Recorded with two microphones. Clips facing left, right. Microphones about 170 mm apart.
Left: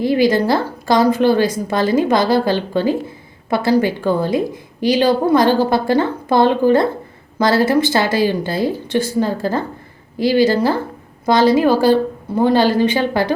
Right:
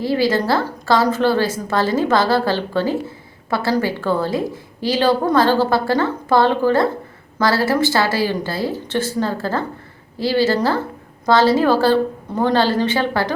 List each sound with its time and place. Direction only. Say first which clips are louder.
0.0 s a woman's voice: left 3 dB; 15° left (ahead or behind)